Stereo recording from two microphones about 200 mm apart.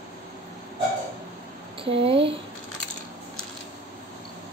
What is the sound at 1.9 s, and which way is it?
Speech, 30° right (ahead or behind).